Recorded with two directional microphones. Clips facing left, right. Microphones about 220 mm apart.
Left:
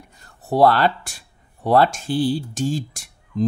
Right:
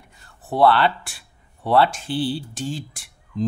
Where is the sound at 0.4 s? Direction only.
40° left (ahead or behind).